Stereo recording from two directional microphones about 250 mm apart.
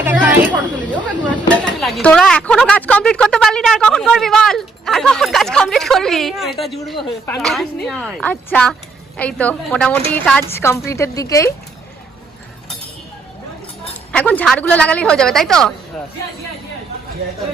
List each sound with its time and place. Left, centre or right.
0.0 s chatter: centre
0.9 s a woman's voice: centre
14.1 s speech: centre